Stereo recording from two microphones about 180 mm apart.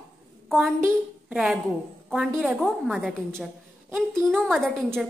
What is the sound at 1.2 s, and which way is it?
A woman's voice, 5° right (ahead or behind).